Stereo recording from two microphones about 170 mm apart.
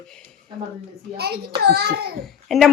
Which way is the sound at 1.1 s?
70° right (ahead or behind).